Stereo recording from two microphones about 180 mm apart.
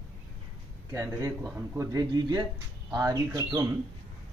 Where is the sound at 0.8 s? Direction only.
20° right (ahead or behind).